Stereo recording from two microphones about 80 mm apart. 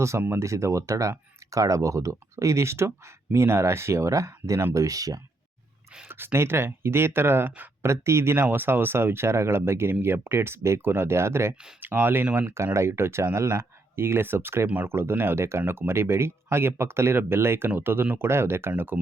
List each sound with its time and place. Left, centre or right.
0.2 s speech: right
6.1 s speech: right
7.9 s speech: right